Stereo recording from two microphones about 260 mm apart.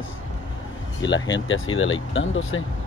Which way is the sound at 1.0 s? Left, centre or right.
Left.